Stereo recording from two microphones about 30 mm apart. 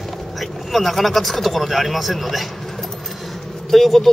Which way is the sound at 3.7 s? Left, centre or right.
Centre.